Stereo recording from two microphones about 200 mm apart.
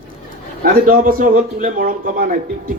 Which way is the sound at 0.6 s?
45° right (ahead or behind).